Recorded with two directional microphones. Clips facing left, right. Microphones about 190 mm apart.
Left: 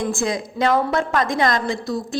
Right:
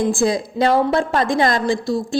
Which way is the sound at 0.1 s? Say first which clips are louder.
Right 5 dB; 35° right (ahead or behind).